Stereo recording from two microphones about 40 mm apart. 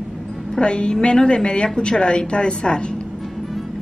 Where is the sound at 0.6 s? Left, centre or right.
Left.